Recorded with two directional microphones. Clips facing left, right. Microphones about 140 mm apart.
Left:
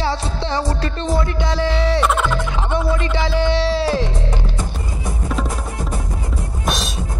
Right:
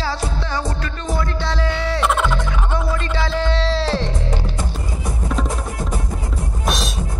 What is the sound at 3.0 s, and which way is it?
Music, 15° left (ahead or behind).